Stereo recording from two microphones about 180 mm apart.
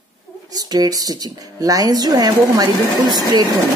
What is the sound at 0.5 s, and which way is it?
Speech, 20° right (ahead or behind).